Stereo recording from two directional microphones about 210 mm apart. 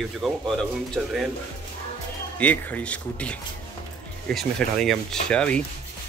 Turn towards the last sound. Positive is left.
turn(degrees=5)  # may be behind; listen again after turning